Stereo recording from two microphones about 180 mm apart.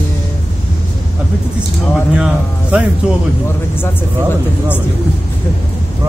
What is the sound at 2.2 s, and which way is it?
Speech, 5° right (ahead or behind).